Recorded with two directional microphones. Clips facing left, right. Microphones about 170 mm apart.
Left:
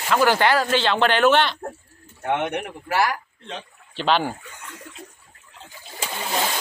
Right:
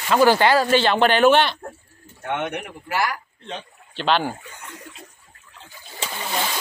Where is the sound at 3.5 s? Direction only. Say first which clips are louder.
Right 1 dB; 5° left (ahead or behind).